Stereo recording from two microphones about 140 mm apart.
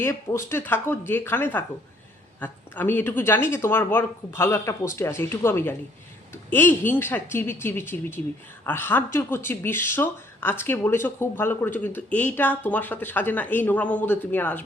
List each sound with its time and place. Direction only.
0.0 s speech: 20° left (ahead or behind)